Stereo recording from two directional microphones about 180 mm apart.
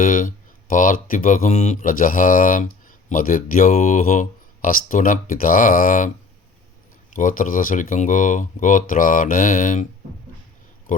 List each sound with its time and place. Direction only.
0.0 s speech: 50° left (ahead or behind)
7.2 s speech: 50° left (ahead or behind)
10.9 s speech: 45° left (ahead or behind)